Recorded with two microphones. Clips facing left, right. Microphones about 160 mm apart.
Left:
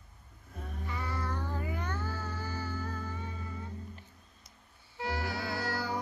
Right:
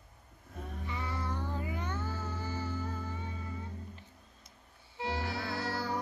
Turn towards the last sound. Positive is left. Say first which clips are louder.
# left 1 dB
turn(degrees=-25)  # may be behind; listen again after turning